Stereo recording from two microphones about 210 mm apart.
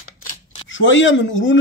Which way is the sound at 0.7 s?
60° left (ahead or behind).